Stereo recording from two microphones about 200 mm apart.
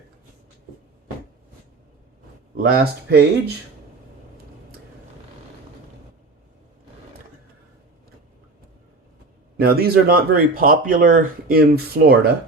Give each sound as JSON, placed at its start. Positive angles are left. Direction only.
{"t": 2.6, "sound": "speech", "side_deg": -50}
{"t": 9.6, "sound": "speech", "side_deg": -50}